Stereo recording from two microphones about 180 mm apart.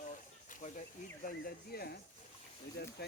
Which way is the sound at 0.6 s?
40° left (ahead or behind).